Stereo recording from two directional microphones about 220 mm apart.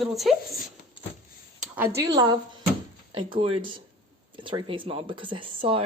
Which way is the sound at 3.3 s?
25° right (ahead or behind).